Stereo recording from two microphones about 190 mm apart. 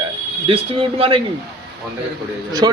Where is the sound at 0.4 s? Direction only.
30° right (ahead or behind).